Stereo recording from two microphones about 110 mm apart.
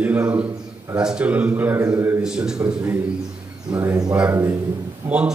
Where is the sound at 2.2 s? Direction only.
5° right (ahead or behind).